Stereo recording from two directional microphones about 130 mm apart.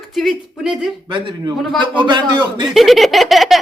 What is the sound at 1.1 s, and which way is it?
A man's voice, 40° right (ahead or behind).